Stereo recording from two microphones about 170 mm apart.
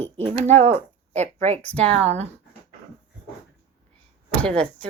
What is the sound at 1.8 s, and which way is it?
Speech, 40° right (ahead or behind).